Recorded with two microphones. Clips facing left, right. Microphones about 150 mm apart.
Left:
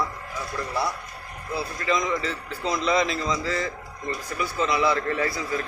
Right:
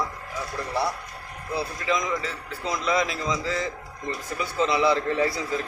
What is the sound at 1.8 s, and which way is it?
A man's voice, 10° right (ahead or behind).